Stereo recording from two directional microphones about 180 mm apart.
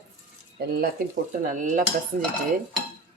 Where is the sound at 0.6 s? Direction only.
50° right (ahead or behind).